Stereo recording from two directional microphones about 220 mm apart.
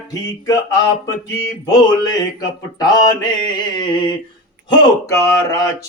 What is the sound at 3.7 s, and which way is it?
Speech, 20° left (ahead or behind).